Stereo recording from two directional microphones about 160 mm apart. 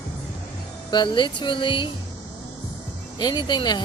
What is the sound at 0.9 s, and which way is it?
Speech, 30° left (ahead or behind).